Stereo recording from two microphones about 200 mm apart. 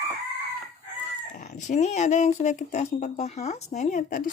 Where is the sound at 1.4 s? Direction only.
35° left (ahead or behind).